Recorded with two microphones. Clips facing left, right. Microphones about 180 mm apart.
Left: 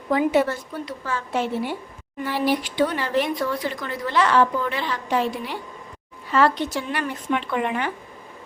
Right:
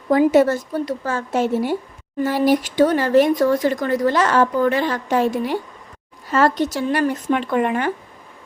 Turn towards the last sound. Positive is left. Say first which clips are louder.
# right 5 dB
turn(degrees=-45)  # may be behind; listen again after turning